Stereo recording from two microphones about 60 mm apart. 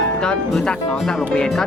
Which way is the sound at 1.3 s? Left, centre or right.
Centre.